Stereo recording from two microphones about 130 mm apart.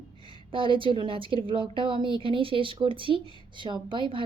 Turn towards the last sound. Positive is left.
turn(degrees=-40)  # may be behind; listen again after turning